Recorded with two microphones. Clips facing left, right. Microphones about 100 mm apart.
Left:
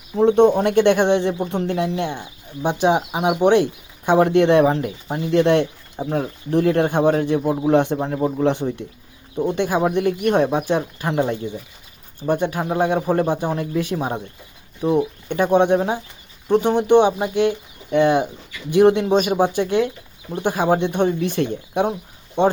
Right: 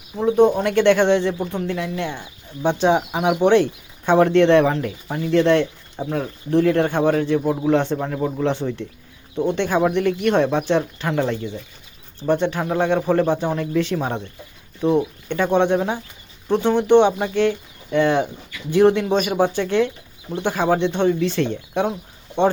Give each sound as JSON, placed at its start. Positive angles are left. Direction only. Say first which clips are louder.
{"t": 0.2, "sound": "speech", "louder": "left 2 dB", "side_deg": 30}
{"t": 0.8, "sound": "speech", "louder": "right 1 dB", "side_deg": 15}
{"t": 14.8, "sound": "speech", "louder": "even", "side_deg": 15}